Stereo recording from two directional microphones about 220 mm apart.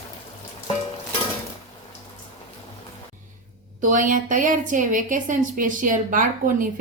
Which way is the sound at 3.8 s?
35° right (ahead or behind).